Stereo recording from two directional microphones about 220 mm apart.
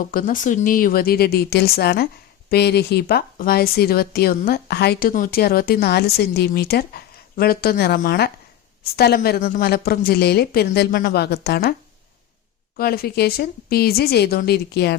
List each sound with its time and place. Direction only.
0.1 s speech: 40° left (ahead or behind)
12.7 s speech: 40° left (ahead or behind)